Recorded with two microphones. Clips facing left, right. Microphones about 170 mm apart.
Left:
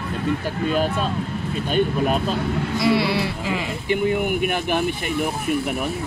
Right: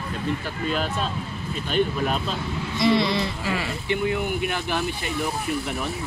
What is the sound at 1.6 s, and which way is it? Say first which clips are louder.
Speech: left 3 dB; 50° left (ahead or behind).